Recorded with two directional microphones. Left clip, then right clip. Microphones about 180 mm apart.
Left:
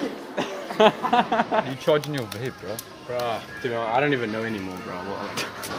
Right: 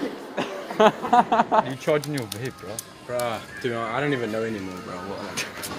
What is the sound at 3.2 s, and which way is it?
Speech, 40° right (ahead or behind).